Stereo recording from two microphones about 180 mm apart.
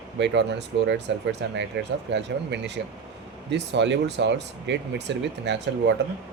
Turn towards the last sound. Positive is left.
turn(degrees=-75)  # may be behind; listen again after turning